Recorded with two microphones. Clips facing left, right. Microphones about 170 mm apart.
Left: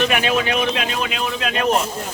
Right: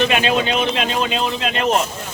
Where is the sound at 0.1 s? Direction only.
25° right (ahead or behind).